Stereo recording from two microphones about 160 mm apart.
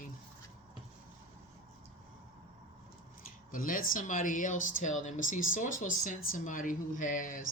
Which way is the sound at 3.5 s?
60° left (ahead or behind).